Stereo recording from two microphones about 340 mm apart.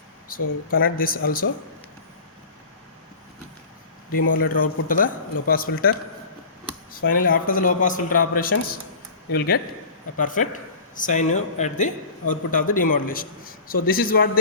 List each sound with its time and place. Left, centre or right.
0.3 s a man's voice: left
4.1 s a man's voice: left
6.9 s a man's voice: left
10.2 s a man's voice: left